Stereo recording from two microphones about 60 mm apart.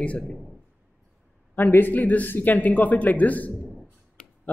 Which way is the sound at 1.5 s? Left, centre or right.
Left.